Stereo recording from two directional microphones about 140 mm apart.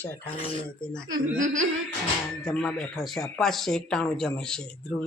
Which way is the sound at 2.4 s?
5° left (ahead or behind).